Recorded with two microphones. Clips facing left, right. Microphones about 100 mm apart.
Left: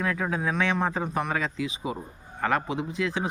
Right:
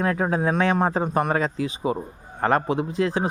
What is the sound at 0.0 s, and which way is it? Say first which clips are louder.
Speech: right 5 dB; 40° right (ahead or behind).